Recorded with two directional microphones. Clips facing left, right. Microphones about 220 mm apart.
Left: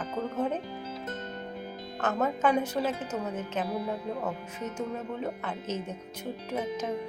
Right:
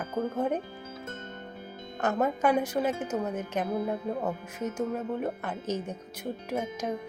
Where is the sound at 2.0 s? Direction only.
10° right (ahead or behind).